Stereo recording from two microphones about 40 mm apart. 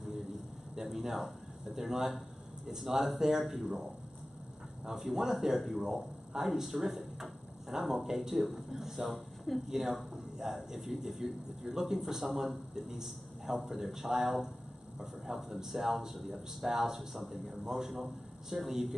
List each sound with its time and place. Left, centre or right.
0.7 s speech: centre
4.8 s speech: centre
6.6 s a man's voice: centre